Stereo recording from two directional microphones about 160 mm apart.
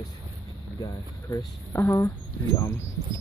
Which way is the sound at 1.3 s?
20° left (ahead or behind).